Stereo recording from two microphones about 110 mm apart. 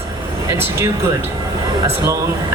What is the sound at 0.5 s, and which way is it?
Speech, 20° right (ahead or behind).